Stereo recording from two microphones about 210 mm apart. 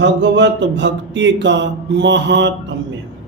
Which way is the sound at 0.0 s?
60° right (ahead or behind).